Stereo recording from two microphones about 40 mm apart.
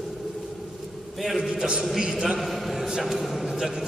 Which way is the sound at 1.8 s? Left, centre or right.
Centre.